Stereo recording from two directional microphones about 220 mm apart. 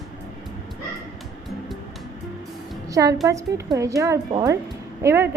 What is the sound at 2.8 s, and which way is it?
Music, 15° right (ahead or behind).